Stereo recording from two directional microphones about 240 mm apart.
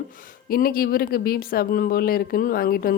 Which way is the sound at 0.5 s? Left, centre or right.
Left.